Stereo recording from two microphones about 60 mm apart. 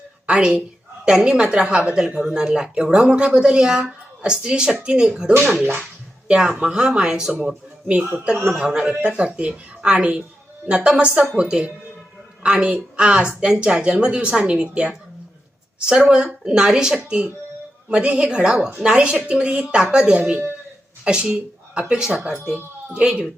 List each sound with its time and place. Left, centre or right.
0.3 s a woman's voice: centre
7.9 s a woman's voice: right